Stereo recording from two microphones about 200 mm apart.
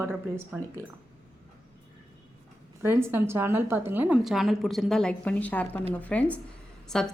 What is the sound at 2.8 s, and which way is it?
A woman's voice, 10° right (ahead or behind).